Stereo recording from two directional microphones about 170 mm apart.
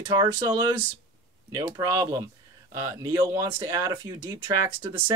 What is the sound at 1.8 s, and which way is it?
Speech, 20° right (ahead or behind).